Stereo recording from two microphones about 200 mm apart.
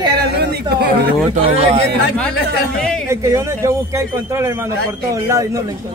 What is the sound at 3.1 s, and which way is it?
A man's voice, 15° right (ahead or behind).